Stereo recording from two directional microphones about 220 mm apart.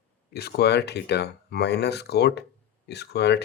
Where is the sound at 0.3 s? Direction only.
45° left (ahead or behind).